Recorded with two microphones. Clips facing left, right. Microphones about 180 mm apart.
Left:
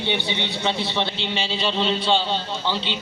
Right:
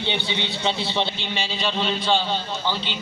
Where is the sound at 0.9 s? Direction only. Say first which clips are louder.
Even; 15° right (ahead or behind).